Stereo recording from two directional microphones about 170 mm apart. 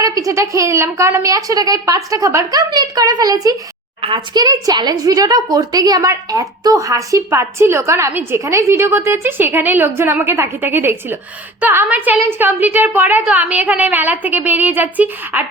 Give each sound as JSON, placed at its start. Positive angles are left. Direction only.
{"t": 0.0, "sound": "a woman's voice", "side_deg": -20}